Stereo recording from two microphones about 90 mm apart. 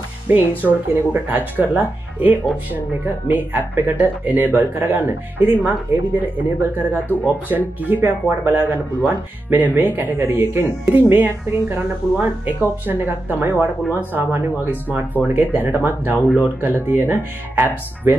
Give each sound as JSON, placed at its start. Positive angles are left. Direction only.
{"t": 0.3, "sound": "speech", "side_deg": -20}